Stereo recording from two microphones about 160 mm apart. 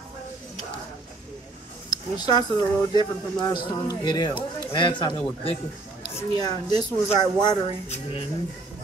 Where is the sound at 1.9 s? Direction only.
25° left (ahead or behind).